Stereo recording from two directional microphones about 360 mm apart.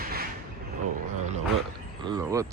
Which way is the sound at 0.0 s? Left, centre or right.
Right.